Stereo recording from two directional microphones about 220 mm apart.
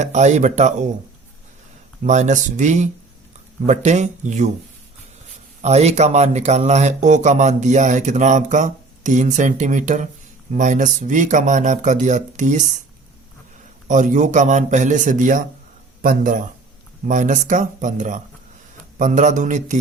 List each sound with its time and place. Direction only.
0.0 s speech: 30° right (ahead or behind)
2.0 s speech: 35° right (ahead or behind)
5.6 s speech: 30° right (ahead or behind)
13.8 s speech: 35° right (ahead or behind)